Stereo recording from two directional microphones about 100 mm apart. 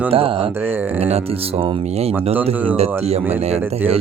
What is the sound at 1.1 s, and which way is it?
Speech, 85° right.